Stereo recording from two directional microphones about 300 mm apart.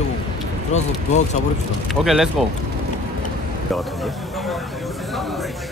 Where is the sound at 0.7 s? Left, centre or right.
Left.